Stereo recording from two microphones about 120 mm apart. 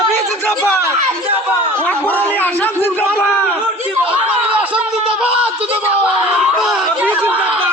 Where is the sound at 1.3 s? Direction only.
15° right (ahead or behind).